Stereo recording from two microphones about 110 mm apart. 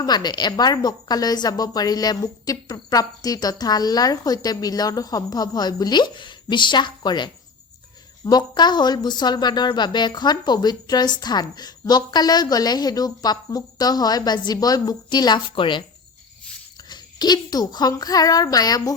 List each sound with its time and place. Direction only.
0.0 s speech: 40° left (ahead or behind)
16.9 s speech: 40° left (ahead or behind)